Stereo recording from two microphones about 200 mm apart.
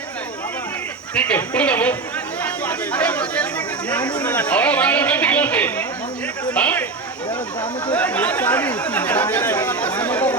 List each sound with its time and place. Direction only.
1.1 s speech: 5° left (ahead or behind)
7.3 s speech: 25° left (ahead or behind)
7.9 s speech: 5° left (ahead or behind)